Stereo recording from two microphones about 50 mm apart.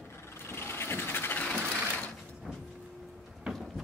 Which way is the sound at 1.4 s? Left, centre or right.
Left.